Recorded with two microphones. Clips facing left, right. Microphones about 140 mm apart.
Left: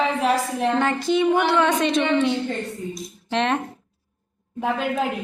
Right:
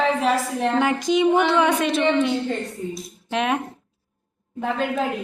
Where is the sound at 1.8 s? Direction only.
5° right (ahead or behind).